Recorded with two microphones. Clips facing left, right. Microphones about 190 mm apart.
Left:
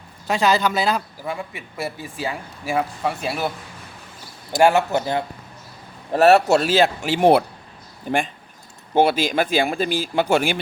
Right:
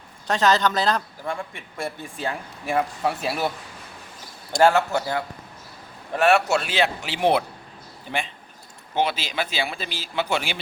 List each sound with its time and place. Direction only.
0.3 s a man's voice: 10° left (ahead or behind)
4.6 s speech: 15° left (ahead or behind)
6.1 s a man's voice: 35° left (ahead or behind)